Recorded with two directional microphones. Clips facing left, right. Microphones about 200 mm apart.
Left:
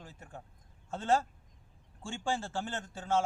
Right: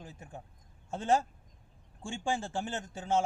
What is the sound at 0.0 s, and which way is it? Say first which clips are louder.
Speech: right 2 dB; 15° right (ahead or behind).